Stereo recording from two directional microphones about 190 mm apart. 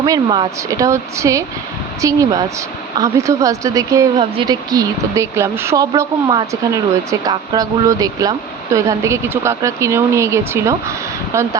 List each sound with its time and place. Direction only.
0.0 s speech: 25° right (ahead or behind)